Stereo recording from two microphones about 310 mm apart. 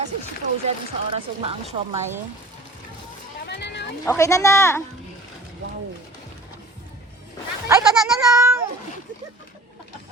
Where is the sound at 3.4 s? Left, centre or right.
Left.